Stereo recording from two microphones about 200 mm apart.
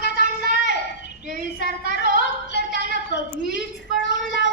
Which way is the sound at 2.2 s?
60° left (ahead or behind).